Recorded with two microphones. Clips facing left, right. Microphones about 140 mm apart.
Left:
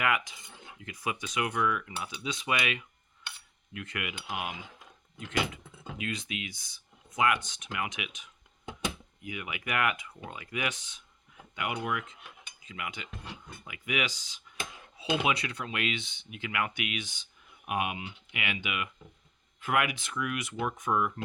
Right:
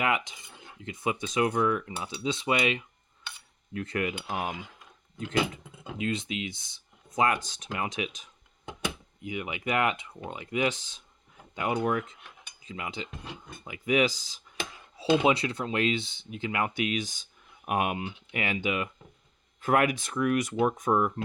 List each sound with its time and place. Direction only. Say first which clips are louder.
0.0 s speech: right 2 dB; 25° right (ahead or behind)
6.0 s speech: right 6 dB; 25° right (ahead or behind)